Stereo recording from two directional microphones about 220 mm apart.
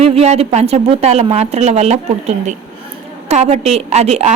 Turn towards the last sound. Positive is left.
turn(degrees=-30)  # may be behind; listen again after turning